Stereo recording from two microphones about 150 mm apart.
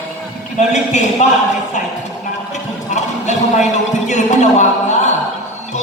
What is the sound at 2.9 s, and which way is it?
A man's voice, 50° left (ahead or behind).